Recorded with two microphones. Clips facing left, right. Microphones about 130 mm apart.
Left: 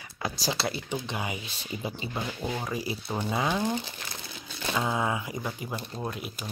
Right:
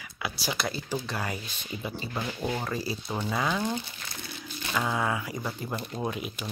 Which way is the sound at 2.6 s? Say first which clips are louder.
Even; 15° left (ahead or behind).